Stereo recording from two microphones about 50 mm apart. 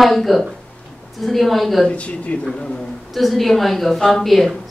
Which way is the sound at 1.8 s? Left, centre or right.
Left.